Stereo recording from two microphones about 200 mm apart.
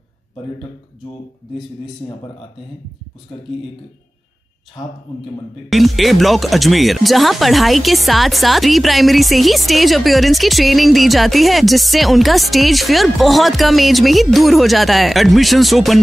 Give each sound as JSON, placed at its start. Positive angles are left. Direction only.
{"t": 2.0, "sound": "speech", "side_deg": 20}
{"t": 5.7, "sound": "speech", "side_deg": 0}